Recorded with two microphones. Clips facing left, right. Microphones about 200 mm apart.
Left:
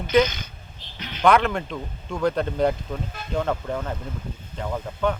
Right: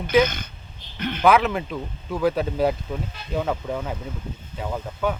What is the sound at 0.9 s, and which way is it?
Speech, 55° right (ahead or behind).